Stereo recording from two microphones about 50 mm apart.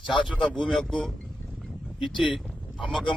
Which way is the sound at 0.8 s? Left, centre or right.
Centre.